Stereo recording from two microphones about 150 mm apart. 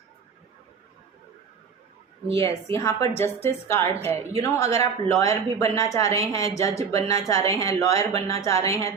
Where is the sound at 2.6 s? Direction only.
20° left (ahead or behind).